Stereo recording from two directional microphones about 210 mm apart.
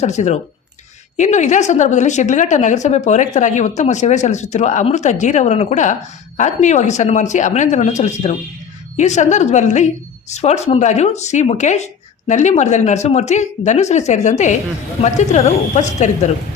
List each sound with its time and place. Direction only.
0.0 s a woman's voice: 35° left (ahead or behind)